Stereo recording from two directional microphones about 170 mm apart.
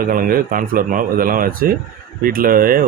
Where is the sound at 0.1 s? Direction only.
60° right (ahead or behind).